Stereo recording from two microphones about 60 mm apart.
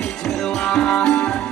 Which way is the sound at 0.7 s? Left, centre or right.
Centre.